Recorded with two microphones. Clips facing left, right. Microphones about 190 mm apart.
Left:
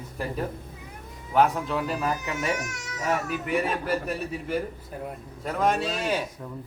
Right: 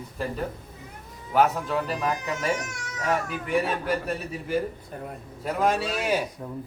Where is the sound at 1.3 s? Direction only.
Centre (ahead or behind).